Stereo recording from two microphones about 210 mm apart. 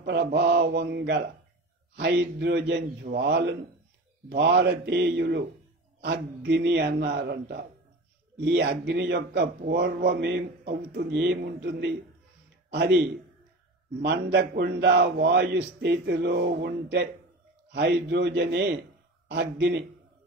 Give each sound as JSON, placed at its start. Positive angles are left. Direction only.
{"t": 0.0, "sound": "a man's voice", "side_deg": -55}
{"t": 14.0, "sound": "a man's voice", "side_deg": -55}